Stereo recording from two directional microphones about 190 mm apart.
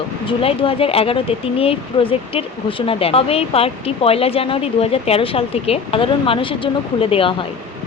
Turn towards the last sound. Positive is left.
turn(degrees=30)  # may be behind; listen again after turning